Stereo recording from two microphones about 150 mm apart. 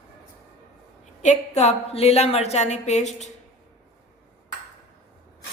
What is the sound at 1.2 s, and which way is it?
A woman's voice, 50° left (ahead or behind).